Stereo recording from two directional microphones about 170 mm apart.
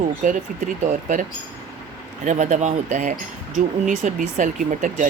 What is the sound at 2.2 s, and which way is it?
Speech, 50° right (ahead or behind).